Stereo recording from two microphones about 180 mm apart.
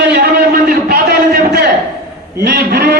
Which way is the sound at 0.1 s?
60° right (ahead or behind).